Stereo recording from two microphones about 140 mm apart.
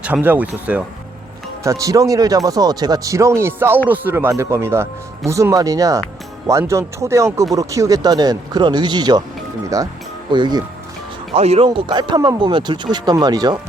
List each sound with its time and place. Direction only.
0.0 s speech: 10° right (ahead or behind)
1.6 s speech: 20° right (ahead or behind)
11.3 s speech: 50° right (ahead or behind); by 13.6 s 30° right (ahead or behind)